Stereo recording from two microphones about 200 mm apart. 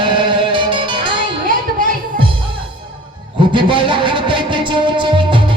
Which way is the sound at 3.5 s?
25° right (ahead or behind).